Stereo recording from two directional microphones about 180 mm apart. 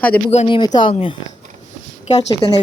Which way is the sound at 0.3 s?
30° left (ahead or behind).